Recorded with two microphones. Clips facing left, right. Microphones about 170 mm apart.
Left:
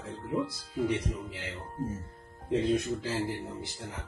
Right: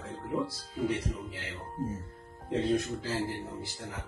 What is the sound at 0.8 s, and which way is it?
Speech, 15° left (ahead or behind).